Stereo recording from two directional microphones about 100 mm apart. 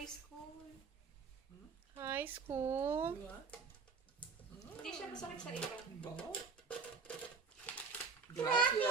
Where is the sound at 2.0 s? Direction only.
20° right (ahead or behind).